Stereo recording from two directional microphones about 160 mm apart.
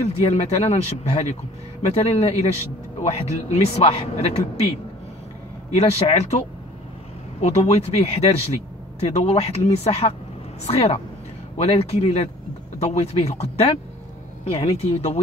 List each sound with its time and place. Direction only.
0.0 s a man's voice: 40° left (ahead or behind)
5.7 s a man's voice: 40° left (ahead or behind)
7.4 s a man's voice: 40° left (ahead or behind)